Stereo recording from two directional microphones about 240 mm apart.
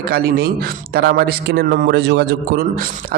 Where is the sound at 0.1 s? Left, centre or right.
Right.